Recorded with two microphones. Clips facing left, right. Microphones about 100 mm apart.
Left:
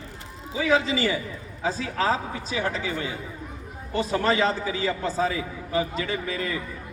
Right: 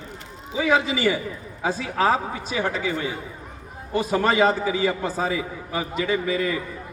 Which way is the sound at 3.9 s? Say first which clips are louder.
Right 3 dB; 15° right (ahead or behind).